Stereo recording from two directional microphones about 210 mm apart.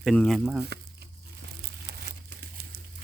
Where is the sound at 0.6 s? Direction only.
50° right (ahead or behind).